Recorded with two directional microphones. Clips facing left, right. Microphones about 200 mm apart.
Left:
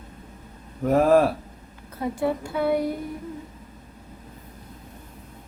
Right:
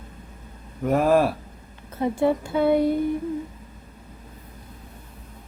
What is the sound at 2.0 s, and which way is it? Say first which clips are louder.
Speech: right 4 dB; 25° right (ahead or behind).